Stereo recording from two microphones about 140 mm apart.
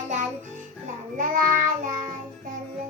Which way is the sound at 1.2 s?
80° right.